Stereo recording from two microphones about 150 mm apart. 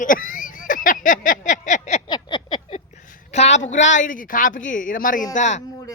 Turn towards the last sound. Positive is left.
turn(degrees=55)  # may be behind; listen again after turning